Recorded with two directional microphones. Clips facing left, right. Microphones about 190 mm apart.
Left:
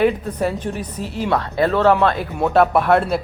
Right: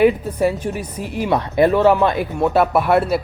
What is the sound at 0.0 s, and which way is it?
Speech, 10° right (ahead or behind).